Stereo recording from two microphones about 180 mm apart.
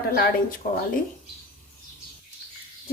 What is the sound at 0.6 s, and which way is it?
Speech, 50° left (ahead or behind).